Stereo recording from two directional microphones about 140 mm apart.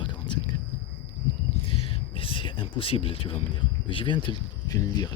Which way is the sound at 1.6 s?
40° left (ahead or behind).